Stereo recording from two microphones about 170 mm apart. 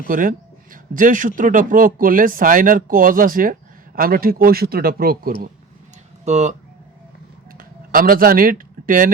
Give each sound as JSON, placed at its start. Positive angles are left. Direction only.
{"t": 0.1, "sound": "speech", "side_deg": -50}
{"t": 6.2, "sound": "speech", "side_deg": -40}
{"t": 7.6, "sound": "speech", "side_deg": -55}